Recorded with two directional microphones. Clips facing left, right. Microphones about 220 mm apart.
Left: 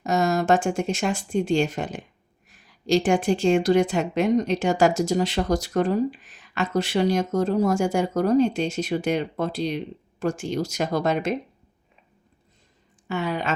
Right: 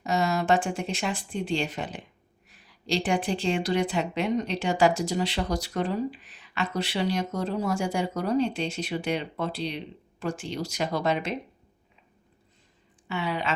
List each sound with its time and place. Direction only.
0.0 s a woman's voice: 45° left (ahead or behind)
13.1 s a woman's voice: 45° left (ahead or behind)